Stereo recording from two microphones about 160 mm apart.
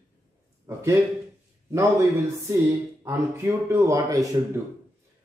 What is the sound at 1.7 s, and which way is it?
A man's voice, 20° right (ahead or behind).